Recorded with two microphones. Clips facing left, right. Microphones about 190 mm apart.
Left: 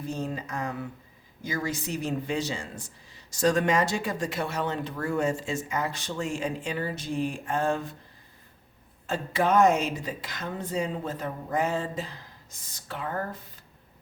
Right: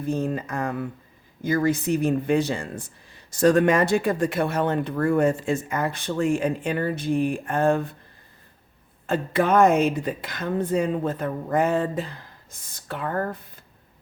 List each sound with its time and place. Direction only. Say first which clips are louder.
0.0 s speech: right 7 dB; 55° right (ahead or behind)
9.0 s speech: right 4 dB; 55° right (ahead or behind)